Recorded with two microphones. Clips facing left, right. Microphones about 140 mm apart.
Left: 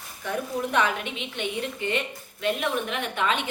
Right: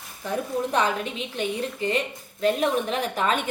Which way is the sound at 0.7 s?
35° right (ahead or behind).